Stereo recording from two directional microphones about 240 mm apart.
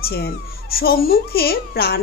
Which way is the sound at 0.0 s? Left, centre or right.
Left.